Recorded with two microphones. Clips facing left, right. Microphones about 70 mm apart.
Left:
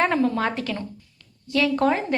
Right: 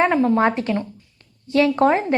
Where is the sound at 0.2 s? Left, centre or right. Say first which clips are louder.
Right 5 dB; right.